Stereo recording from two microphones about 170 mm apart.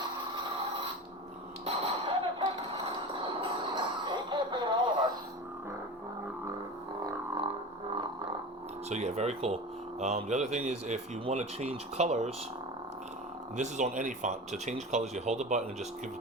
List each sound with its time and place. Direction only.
1.6 s clang: 30° right (ahead or behind)
3.8 s music: 25° right (ahead or behind)
7.0 s didgeridoo: 30° right (ahead or behind)
8.9 s speech: 40° right (ahead or behind)
13.6 s speech: 45° right (ahead or behind)